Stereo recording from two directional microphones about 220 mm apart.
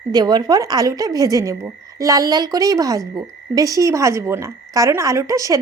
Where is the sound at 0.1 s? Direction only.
20° right (ahead or behind).